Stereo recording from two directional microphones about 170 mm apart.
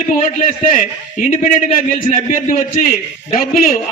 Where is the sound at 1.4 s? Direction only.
50° left (ahead or behind).